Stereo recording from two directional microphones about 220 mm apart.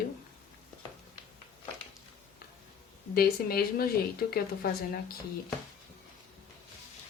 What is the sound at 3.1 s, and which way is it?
Speech, 45° left (ahead or behind).